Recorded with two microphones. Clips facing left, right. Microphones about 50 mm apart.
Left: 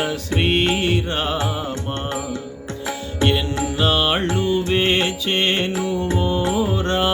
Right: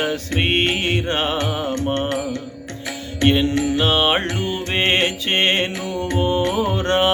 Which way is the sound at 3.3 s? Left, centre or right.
Right.